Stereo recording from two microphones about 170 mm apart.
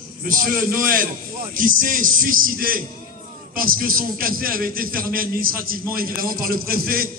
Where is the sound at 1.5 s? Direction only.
55° right (ahead or behind).